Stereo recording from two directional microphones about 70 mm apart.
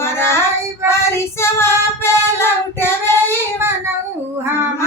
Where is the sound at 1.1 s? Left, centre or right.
Left.